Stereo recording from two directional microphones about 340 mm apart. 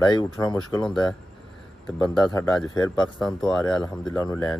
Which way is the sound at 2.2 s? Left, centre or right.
Centre.